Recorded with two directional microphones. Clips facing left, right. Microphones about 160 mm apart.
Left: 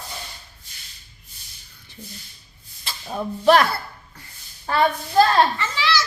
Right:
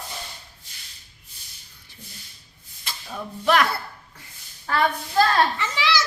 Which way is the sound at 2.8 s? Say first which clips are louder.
Left 6 dB; 35° left (ahead or behind).